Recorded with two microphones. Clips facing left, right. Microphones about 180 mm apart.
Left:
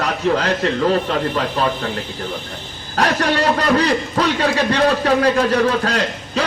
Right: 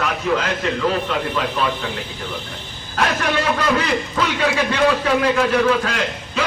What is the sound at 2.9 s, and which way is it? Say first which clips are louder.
A man's voice: left 3 dB; 35° left (ahead or behind).